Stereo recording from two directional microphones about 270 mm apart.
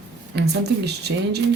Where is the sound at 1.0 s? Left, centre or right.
Right.